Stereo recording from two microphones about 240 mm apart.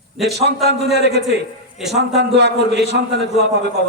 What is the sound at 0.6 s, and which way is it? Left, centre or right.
Speech, right.